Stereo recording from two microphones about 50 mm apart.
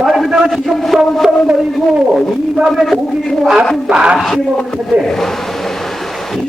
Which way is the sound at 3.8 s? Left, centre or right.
Centre.